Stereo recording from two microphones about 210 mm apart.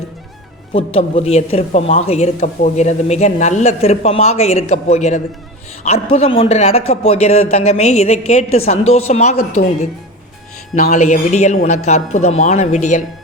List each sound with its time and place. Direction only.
0.7 s a woman's voice: 25° left (ahead or behind)
10.8 s a woman's voice: 35° left (ahead or behind)